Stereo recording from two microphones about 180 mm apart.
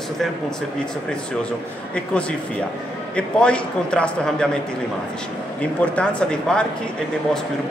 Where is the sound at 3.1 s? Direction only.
5° left (ahead or behind).